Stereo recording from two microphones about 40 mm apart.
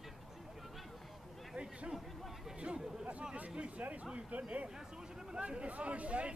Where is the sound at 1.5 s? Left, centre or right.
Right.